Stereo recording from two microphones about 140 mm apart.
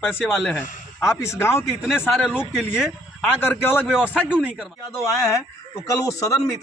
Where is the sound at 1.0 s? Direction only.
20° left (ahead or behind).